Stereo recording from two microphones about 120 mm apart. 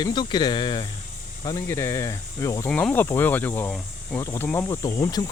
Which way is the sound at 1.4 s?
25° left (ahead or behind).